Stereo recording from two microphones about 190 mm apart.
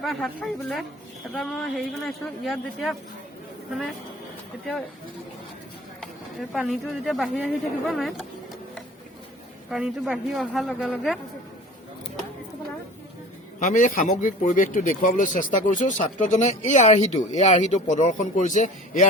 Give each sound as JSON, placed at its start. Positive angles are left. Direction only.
{"t": 0.0, "sound": "speech", "side_deg": 0}
{"t": 6.5, "sound": "speech", "side_deg": 0}
{"t": 9.6, "sound": "speech", "side_deg": 0}
{"t": 13.6, "sound": "speech", "side_deg": 40}